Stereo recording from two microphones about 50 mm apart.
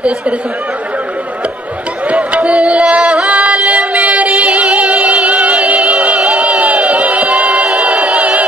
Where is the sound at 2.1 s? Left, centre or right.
Right.